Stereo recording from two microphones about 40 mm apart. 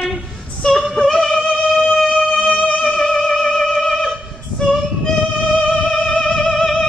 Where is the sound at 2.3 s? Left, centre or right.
Left.